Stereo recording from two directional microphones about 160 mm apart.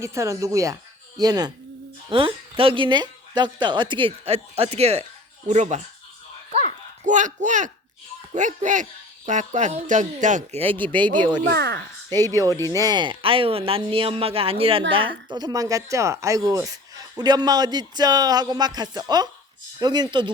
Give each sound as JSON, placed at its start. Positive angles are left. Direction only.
{"t": 0.0, "sound": "a woman's voice", "side_deg": -15}
{"t": 6.5, "sound": "a sound", "side_deg": -45}
{"t": 8.3, "sound": "speech", "side_deg": -50}
{"t": 10.7, "sound": "speech", "side_deg": 10}
{"t": 10.9, "sound": "speech", "side_deg": -30}
{"t": 11.4, "sound": "speech", "side_deg": -90}
{"t": 12.1, "sound": "speech", "side_deg": 15}
{"t": 12.7, "sound": "a woman's voice", "side_deg": -25}